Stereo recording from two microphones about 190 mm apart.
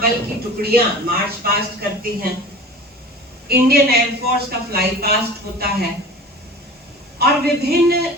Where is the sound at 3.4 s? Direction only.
55° right (ahead or behind).